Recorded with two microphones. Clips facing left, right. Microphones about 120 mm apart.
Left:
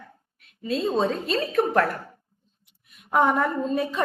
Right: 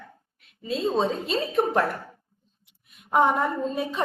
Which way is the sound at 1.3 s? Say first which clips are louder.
Left 1 dB; 25° right (ahead or behind).